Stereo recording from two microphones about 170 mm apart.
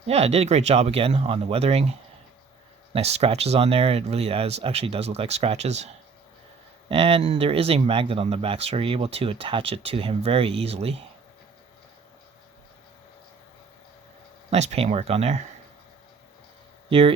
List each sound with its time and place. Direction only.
0.1 s speech: 40° right (ahead or behind)
14.5 s speech: 40° right (ahead or behind)